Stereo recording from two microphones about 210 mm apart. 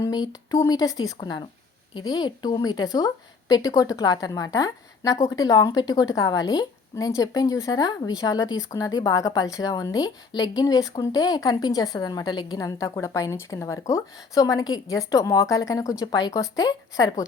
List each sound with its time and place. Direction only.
0.0 s a woman's voice: 20° left (ahead or behind)